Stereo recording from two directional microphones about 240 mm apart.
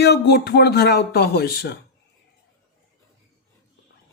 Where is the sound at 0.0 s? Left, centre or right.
Left.